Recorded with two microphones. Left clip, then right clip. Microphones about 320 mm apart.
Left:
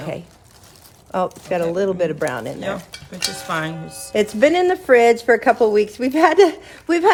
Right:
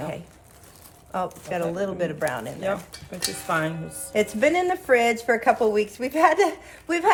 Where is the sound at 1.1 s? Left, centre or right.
Left.